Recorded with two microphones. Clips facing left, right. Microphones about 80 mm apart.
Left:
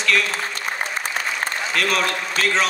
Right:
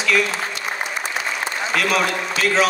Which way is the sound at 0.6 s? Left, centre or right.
Left.